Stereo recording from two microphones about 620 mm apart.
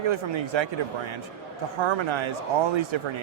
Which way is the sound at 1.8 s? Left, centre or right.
Right.